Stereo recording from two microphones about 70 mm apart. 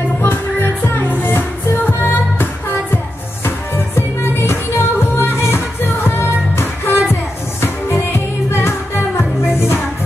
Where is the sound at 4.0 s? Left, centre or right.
Left.